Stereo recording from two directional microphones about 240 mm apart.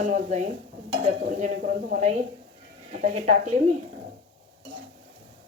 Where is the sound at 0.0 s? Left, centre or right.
Right.